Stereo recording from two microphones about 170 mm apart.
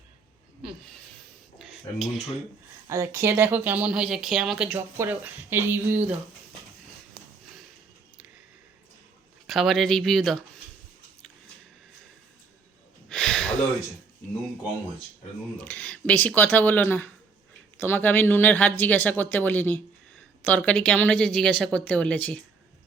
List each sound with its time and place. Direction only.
1.5 s dishes: centre (ahead or behind)
2.8 s speech: 15° right (ahead or behind)
9.5 s a woman's voice: centre (ahead or behind)
13.1 s a sound: 5° left (ahead or behind)
15.5 s a woman's voice: 10° left (ahead or behind)